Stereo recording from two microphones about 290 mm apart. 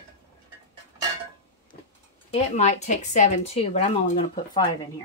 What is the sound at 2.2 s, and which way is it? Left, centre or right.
Speech, left.